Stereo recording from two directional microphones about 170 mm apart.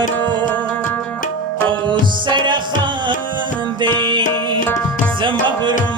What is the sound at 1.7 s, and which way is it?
Music, 30° right (ahead or behind).